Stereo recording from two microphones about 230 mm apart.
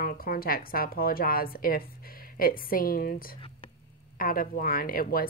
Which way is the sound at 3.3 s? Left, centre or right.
Left.